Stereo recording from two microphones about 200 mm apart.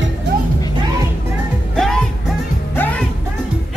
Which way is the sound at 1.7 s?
Centre (ahead or behind).